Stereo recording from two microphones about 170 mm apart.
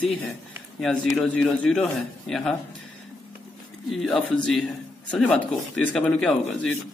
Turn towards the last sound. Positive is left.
turn(degrees=5)  # may be behind; listen again after turning